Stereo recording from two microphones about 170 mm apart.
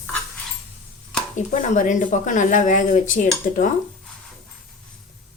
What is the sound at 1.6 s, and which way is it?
A woman's voice, 50° left (ahead or behind).